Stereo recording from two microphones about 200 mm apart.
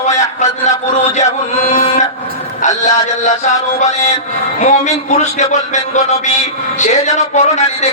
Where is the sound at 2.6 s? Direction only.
35° left (ahead or behind).